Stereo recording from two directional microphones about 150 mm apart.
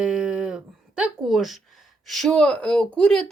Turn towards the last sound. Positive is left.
turn(degrees=5)  # may be behind; listen again after turning